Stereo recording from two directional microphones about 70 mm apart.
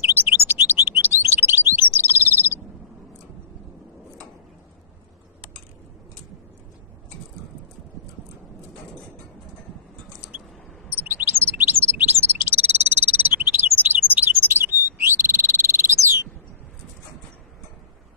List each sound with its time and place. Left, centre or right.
0.0 s chirp: right
10.9 s bird: right